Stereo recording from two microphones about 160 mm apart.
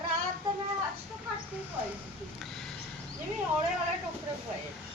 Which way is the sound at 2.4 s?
Centre (ahead or behind).